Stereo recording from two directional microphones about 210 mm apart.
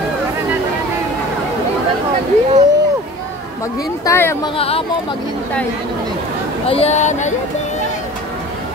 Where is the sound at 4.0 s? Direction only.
15° left (ahead or behind).